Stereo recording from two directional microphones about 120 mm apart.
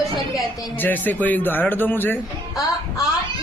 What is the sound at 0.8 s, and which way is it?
Speech, 15° left (ahead or behind).